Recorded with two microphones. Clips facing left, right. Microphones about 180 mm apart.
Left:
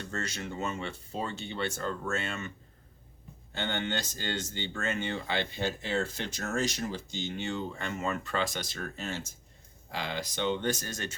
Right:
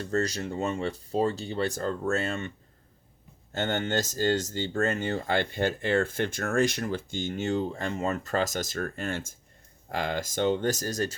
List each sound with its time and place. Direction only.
0.0 s speech: 35° right (ahead or behind)
3.5 s speech: 45° right (ahead or behind)